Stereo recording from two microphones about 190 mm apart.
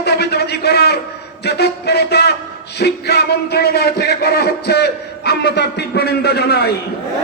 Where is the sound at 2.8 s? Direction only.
60° left (ahead or behind).